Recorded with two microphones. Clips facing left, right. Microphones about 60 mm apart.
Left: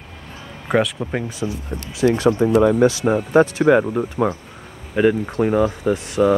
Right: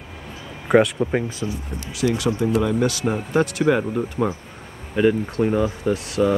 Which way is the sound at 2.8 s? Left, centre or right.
Left.